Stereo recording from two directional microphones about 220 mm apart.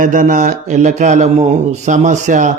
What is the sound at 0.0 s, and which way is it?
A man's voice, 35° right (ahead or behind).